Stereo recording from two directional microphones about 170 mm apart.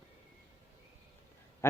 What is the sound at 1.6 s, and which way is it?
Honk, 15° left (ahead or behind).